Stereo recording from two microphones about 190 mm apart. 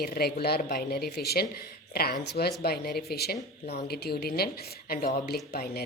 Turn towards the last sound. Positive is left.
turn(degrees=50)  # may be behind; listen again after turning